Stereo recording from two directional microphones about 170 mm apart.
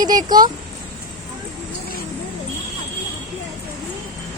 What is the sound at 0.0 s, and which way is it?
Speech, 25° right (ahead or behind).